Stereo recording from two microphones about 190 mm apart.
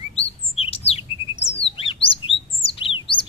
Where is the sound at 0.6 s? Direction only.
30° left (ahead or behind).